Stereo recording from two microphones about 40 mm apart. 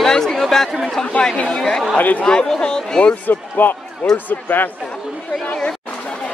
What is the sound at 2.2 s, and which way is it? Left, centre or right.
Speech, left.